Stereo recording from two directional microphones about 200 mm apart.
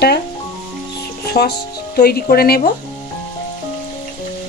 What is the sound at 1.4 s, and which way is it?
Speech, 55° left (ahead or behind).